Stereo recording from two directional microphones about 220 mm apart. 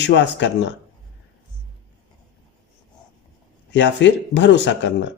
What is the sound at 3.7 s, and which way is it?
Speech, 55° left (ahead or behind).